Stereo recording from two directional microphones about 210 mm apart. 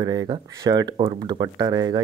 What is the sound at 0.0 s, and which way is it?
Speech, 20° right (ahead or behind).